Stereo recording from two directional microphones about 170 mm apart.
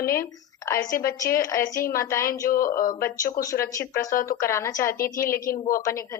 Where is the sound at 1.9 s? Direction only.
15° left (ahead or behind).